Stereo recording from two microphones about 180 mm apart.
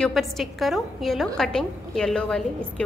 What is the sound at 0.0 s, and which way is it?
A woman's voice, centre (ahead or behind).